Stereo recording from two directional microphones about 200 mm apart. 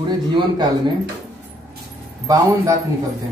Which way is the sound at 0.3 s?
20° right (ahead or behind).